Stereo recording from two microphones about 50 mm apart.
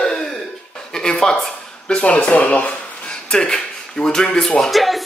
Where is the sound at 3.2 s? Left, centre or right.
Centre.